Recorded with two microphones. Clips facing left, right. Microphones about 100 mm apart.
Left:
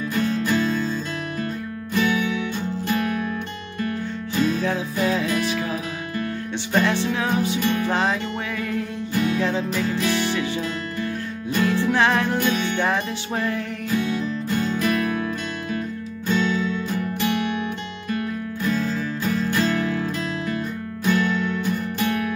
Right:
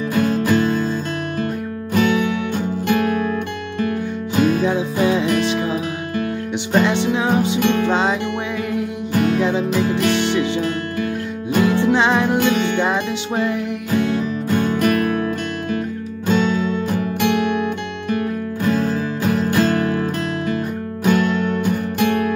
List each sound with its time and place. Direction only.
0.1 s music: 55° right (ahead or behind)
2.0 s music: 55° right (ahead or behind)
4.4 s music: 65° right (ahead or behind)
4.6 s music: 20° right (ahead or behind)
7.6 s music: 70° right (ahead or behind)
7.9 s music: 20° right (ahead or behind)
9.1 s music: 60° right (ahead or behind)
9.4 s music: 20° right (ahead or behind)
9.8 s music: 65° right (ahead or behind)
10.1 s music: 20° right (ahead or behind)
11.8 s music: 20° right (ahead or behind)
12.4 s music: 65° right (ahead or behind)
12.7 s music: 20° right (ahead or behind)
13.9 s music: 60° right (ahead or behind)